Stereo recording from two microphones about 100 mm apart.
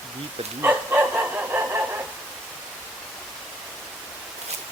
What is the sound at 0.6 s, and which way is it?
Dog, 20° right (ahead or behind).